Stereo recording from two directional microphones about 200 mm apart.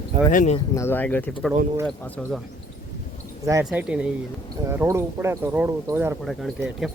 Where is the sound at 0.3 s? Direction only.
40° left (ahead or behind).